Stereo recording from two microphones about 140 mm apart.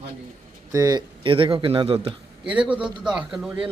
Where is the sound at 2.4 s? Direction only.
10° right (ahead or behind).